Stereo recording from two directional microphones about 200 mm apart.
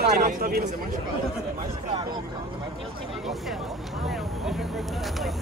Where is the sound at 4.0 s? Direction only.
Centre (ahead or behind).